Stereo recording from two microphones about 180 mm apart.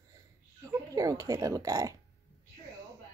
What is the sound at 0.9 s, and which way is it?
Speech, 20° right (ahead or behind).